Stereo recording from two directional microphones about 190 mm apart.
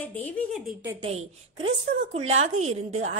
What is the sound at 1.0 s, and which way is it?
A woman's voice, 25° right (ahead or behind).